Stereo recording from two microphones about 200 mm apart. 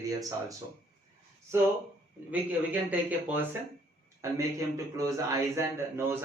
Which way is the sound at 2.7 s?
10° right (ahead or behind).